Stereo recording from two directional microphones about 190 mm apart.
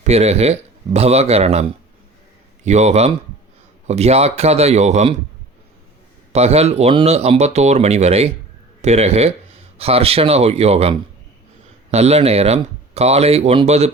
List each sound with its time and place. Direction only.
0.0 s speech: 35° right (ahead or behind)
2.6 s speech: 35° right (ahead or behind)
6.3 s speech: 35° right (ahead or behind)